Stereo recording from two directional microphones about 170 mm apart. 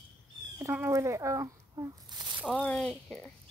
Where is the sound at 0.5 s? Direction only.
15° right (ahead or behind).